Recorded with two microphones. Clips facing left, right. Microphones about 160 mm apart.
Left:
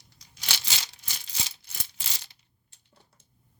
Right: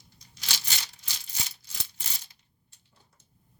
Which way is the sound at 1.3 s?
90° left.